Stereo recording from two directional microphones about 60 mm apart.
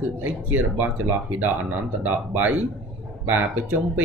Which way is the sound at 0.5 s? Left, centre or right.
Right.